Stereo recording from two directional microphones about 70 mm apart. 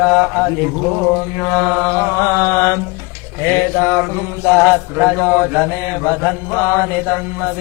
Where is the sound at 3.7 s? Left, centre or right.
Left.